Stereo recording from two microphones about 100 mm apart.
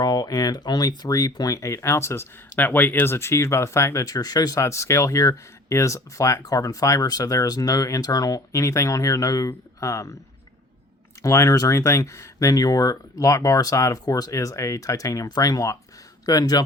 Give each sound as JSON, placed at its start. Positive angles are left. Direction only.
{"t": 0.0, "sound": "speech", "side_deg": 40}
{"t": 11.2, "sound": "speech", "side_deg": 35}